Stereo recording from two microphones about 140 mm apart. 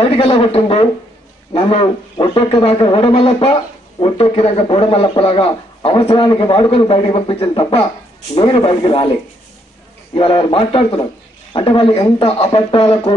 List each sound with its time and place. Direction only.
0.0 s a man's voice: 45° left (ahead or behind)
10.1 s a man's voice: 40° left (ahead or behind)